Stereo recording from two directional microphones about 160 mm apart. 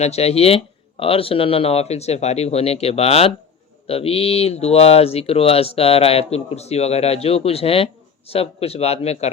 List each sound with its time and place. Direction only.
0.0 s speech: 40° left (ahead or behind)